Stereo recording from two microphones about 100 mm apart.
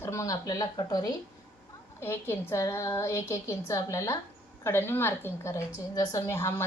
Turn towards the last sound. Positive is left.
turn(degrees=25)  # may be behind; listen again after turning